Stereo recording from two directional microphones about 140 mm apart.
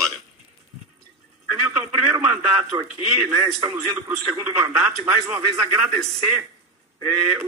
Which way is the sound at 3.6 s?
25° right (ahead or behind).